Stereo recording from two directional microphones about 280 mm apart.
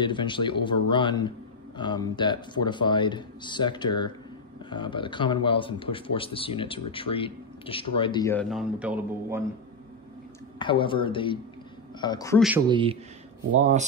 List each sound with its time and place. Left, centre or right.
0.0 s speech: centre
10.6 s speech: centre
12.4 s speech: centre
12.6 s a man's voice: centre